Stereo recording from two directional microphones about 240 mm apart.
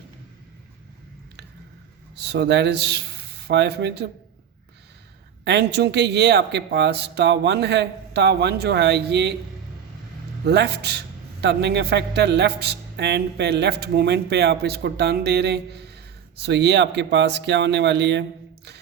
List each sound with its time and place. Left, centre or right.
2.1 s speech: right
5.5 s a man's voice: right
10.4 s a man's voice: right